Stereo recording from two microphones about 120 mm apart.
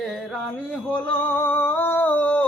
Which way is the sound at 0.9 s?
15° left (ahead or behind).